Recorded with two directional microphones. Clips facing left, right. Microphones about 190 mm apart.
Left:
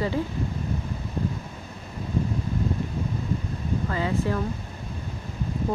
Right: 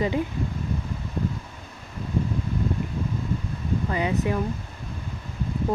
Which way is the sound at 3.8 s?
15° right (ahead or behind).